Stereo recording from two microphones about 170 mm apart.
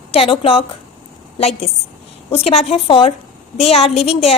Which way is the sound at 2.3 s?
35° left (ahead or behind).